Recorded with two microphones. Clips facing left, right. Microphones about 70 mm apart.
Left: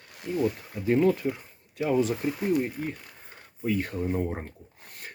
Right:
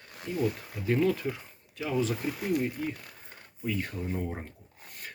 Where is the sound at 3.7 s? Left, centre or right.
Left.